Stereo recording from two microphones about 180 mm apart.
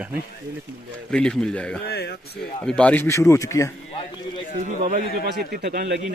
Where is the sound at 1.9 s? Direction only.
65° left (ahead or behind).